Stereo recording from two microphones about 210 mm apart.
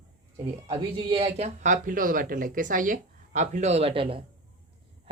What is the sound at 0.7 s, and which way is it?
Speech, 30° right (ahead or behind).